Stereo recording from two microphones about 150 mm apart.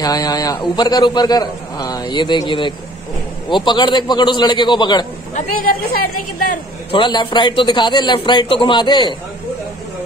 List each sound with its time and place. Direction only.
0.0 s a man's voice: 25° left (ahead or behind)
5.3 s a woman's voice: 75° left (ahead or behind)
6.9 s a man's voice: 30° left (ahead or behind)